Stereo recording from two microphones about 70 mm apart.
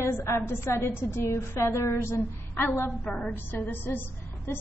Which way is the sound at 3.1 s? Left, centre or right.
Centre.